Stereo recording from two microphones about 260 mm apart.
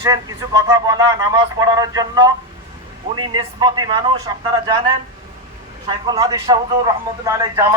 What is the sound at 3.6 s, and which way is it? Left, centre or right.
Speech, centre.